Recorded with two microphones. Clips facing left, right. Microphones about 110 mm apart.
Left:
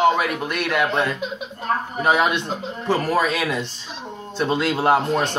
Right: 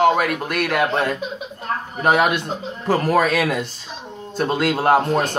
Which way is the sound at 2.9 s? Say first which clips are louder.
Right 3 dB; 50° right (ahead or behind).